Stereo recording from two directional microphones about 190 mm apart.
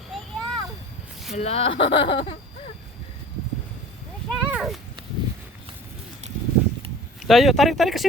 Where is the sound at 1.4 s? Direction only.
30° left (ahead or behind).